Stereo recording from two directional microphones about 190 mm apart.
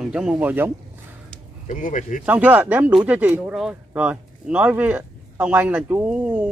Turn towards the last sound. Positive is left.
turn(degrees=-10)  # may be behind; listen again after turning